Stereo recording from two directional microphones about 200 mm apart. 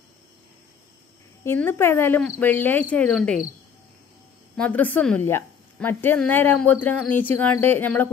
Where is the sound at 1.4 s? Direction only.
10° left (ahead or behind).